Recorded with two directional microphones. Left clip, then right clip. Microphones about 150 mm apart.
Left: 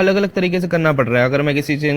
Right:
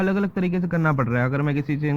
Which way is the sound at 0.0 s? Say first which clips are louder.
Left 9 dB; 35° left (ahead or behind).